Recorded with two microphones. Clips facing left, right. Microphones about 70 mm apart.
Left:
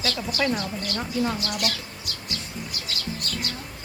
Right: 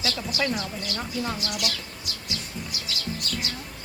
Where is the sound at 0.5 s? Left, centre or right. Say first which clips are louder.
Left 2 dB; left.